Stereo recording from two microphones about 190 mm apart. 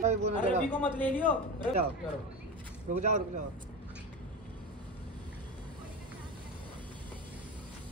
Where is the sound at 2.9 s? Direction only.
40° right (ahead or behind).